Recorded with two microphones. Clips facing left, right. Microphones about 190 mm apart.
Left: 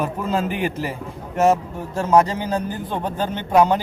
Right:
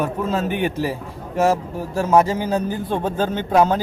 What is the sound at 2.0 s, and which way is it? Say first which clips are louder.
Speech: even; 10° right (ahead or behind).